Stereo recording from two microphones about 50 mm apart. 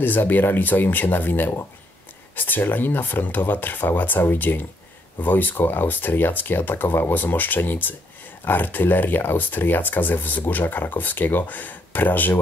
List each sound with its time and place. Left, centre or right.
0.0 s speech: left